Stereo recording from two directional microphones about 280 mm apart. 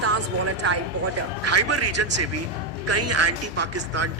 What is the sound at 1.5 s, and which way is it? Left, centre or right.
A man's voice, right.